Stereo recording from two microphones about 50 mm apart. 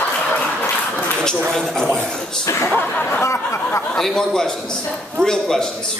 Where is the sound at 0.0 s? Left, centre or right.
Left.